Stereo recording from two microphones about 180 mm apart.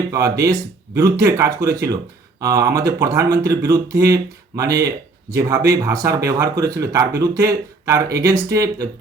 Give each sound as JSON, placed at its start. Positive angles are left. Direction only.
{"t": 0.1, "sound": "speech", "side_deg": -20}